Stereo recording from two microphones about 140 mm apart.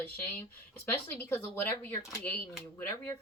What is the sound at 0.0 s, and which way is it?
Speech, 15° left (ahead or behind).